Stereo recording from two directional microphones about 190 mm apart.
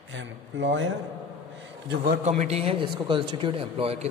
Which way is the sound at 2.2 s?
35° right (ahead or behind).